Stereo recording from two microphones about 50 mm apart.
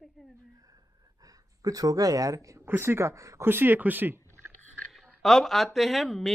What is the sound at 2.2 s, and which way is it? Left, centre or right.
Speech, right.